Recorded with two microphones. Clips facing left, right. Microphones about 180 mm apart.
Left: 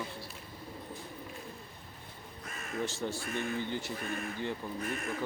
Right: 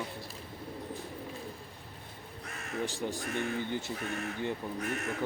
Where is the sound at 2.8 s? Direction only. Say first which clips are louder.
Right 1 dB; 15° right (ahead or behind).